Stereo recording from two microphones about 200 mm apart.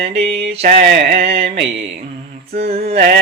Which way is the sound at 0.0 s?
30° right (ahead or behind).